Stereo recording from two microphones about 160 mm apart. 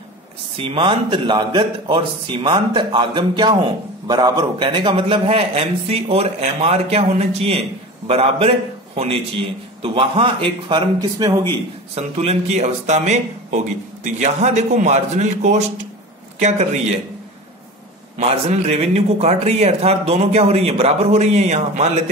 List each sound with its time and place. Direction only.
0.6 s a man's voice: 30° right (ahead or behind)
11.9 s a man's voice: 40° right (ahead or behind)
18.1 s a man's voice: 45° right (ahead or behind)